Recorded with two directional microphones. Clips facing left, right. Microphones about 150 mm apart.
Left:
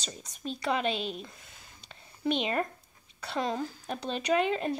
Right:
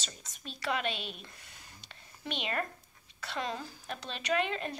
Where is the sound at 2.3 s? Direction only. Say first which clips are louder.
Left 6 dB; 30° left (ahead or behind).